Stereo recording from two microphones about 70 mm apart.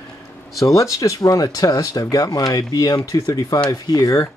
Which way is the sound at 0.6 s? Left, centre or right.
Left.